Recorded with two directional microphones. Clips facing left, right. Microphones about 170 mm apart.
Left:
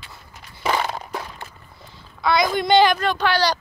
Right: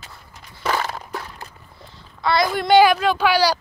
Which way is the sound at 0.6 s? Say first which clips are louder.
Left 1 dB; centre (ahead or behind).